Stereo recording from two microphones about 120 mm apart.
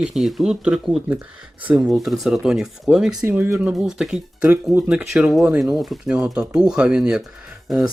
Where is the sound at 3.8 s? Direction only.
5° right (ahead or behind).